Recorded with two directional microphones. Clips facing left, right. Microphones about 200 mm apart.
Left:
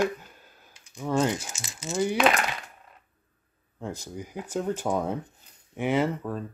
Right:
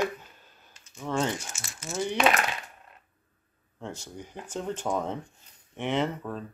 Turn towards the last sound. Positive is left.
turn(degrees=5)  # may be behind; listen again after turning